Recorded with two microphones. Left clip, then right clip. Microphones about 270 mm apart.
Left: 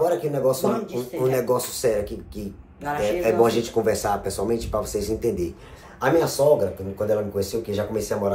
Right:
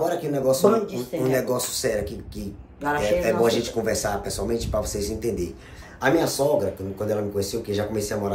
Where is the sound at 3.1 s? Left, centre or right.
Centre.